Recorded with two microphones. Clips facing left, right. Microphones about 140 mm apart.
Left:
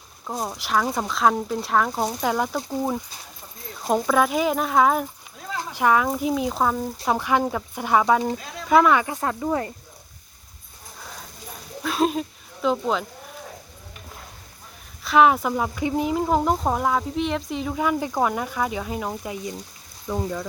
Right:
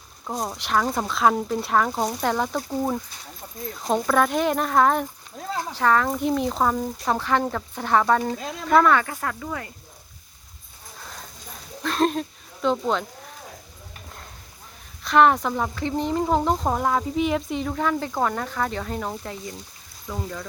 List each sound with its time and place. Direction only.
0.3 s speech: centre (ahead or behind)
9.2 s speech: 25° left (ahead or behind)
11.0 s clip-clop: 5° left (ahead or behind)
11.8 s a sound: 5° left (ahead or behind)
12.6 s speech: 5° left (ahead or behind)
15.0 s speech: 5° left (ahead or behind); by 20.4 s 20° left (ahead or behind)